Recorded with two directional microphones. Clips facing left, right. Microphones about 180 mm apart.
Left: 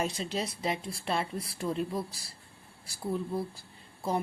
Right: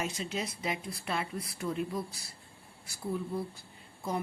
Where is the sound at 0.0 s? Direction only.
35° left (ahead or behind).